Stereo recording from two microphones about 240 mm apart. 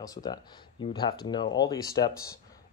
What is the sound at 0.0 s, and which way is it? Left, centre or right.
Speech, centre.